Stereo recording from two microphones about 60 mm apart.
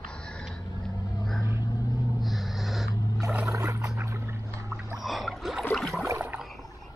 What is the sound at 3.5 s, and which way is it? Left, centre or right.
Boat, right.